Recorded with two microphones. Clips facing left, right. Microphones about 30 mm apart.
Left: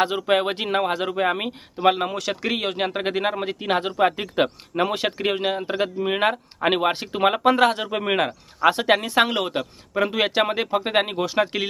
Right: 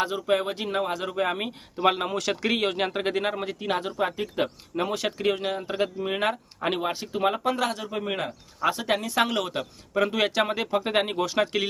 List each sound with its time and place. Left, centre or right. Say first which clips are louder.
0.0 s speech: left 4 dB; left; by 3.5 s centre
3.5 s speech: left 5 dB; left
6.7 s speech: left 6 dB; left; by 11.6 s centre